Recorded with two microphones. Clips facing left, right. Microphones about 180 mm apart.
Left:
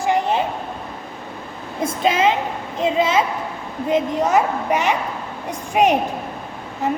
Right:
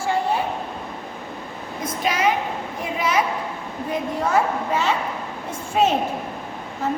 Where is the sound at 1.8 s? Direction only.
25° left (ahead or behind).